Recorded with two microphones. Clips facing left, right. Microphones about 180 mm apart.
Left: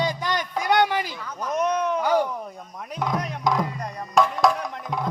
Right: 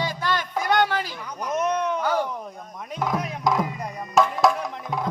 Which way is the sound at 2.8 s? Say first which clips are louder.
Even; centre (ahead or behind).